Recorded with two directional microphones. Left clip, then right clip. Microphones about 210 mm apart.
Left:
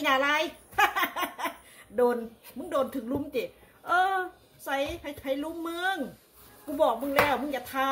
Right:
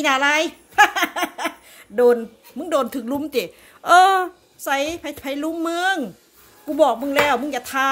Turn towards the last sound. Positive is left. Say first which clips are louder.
# right 8 dB
turn(degrees=-55)  # may be behind; listen again after turning